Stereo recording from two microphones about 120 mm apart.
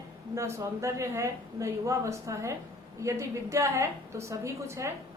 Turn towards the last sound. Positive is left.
turn(degrees=-25)  # may be behind; listen again after turning